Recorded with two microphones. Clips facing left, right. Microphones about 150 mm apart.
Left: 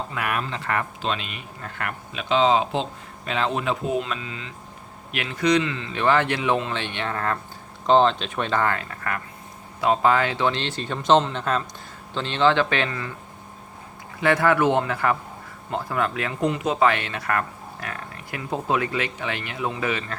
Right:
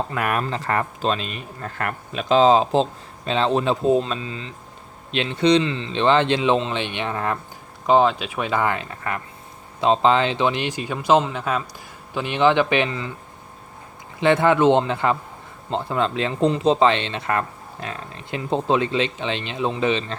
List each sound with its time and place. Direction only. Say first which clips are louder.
0.1 s a man's voice: right 4 dB; 45° right (ahead or behind); by 13.1 s 20° right (ahead or behind)
14.2 s speech: right 3 dB; 20° right (ahead or behind)